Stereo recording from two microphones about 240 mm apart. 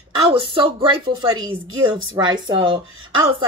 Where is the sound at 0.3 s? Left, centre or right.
Right.